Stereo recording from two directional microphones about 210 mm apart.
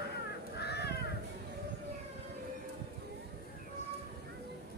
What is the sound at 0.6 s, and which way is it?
Crow, 50° left (ahead or behind).